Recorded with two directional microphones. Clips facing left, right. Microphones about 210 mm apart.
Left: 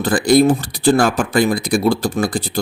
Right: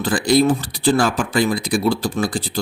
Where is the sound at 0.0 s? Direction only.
45° left (ahead or behind).